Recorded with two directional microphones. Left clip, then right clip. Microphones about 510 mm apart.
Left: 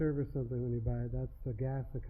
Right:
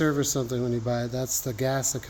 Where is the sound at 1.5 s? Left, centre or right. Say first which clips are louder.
Right 15 dB; centre.